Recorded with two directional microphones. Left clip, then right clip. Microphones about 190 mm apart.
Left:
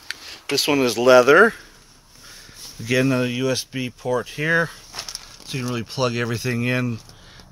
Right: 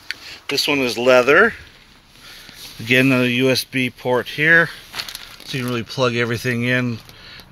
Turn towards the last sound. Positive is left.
turn(degrees=0)  # may be behind; listen again after turning